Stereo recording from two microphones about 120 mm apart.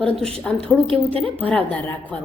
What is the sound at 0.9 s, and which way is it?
Speech, 50° right (ahead or behind).